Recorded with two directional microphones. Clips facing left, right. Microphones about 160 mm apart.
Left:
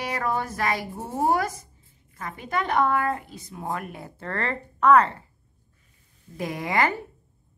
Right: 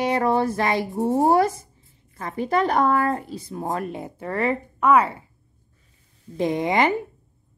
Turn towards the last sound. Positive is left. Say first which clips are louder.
# right 5 dB
turn(degrees=-20)  # may be behind; listen again after turning